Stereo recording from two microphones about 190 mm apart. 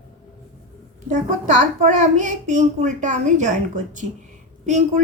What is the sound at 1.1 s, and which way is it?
A child's voice, 40° right (ahead or behind).